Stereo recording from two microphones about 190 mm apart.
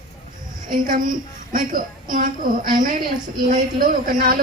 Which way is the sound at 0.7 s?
50° right (ahead or behind).